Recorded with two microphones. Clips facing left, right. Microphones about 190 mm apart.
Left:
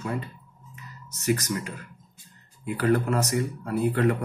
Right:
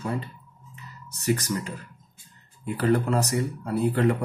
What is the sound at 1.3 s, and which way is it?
Speech, 30° right (ahead or behind).